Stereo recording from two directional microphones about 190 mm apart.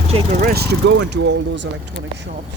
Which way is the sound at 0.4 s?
55° right (ahead or behind).